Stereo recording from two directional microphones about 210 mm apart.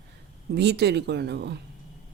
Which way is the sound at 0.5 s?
50° right (ahead or behind).